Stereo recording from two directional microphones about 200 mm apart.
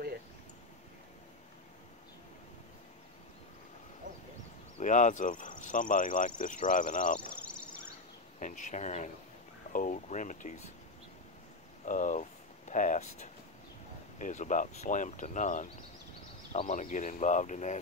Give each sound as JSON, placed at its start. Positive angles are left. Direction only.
{"t": 4.1, "sound": "a sound", "side_deg": -65}
{"t": 4.7, "sound": "speech", "side_deg": 40}
{"t": 8.4, "sound": "speech", "side_deg": 40}
{"t": 11.8, "sound": "speech", "side_deg": 40}